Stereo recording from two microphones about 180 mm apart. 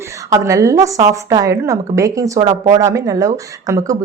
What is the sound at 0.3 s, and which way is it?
A woman's voice, 15° right (ahead or behind).